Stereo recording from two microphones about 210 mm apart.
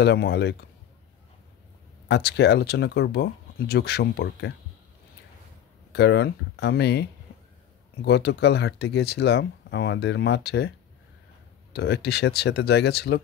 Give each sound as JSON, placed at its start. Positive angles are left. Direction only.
{"t": 0.0, "sound": "speech", "side_deg": 50}
{"t": 2.0, "sound": "speech", "side_deg": 50}
{"t": 5.9, "sound": "speech", "side_deg": 50}
{"t": 11.7, "sound": "speech", "side_deg": 50}